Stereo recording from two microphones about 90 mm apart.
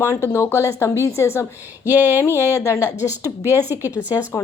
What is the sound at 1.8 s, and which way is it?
Speech, 20° right (ahead or behind).